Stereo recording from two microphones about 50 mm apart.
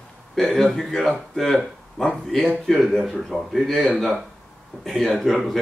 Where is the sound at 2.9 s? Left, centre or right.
Centre.